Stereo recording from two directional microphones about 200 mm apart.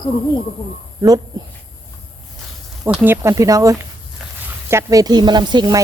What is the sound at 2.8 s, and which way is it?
A woman's voice, 10° right (ahead or behind).